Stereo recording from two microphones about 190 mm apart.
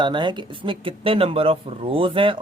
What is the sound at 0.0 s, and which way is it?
Speech, 25° right (ahead or behind).